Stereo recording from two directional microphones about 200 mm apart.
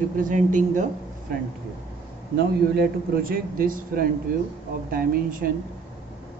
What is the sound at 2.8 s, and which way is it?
A man's voice, 45° right (ahead or behind).